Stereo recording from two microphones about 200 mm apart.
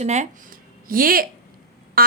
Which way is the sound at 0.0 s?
35° right (ahead or behind).